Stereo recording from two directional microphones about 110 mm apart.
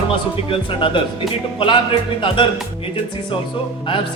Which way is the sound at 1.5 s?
50° left (ahead or behind).